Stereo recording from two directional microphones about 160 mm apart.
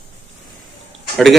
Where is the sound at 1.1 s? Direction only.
Centre (ahead or behind).